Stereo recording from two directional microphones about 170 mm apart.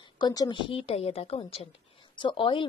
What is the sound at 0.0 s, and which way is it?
A woman's voice, 25° left (ahead or behind).